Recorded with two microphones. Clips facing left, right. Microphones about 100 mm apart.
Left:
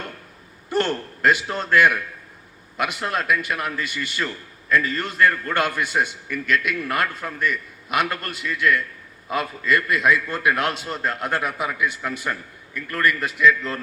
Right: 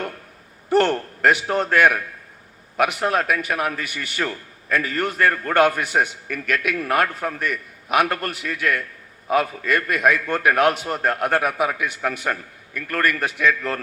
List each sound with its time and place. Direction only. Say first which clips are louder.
0.7 s a man's voice: right 5 dB; 55° right (ahead or behind)